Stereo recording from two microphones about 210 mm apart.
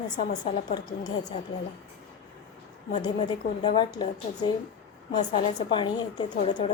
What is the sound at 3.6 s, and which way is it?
A woman's voice, 20° left (ahead or behind).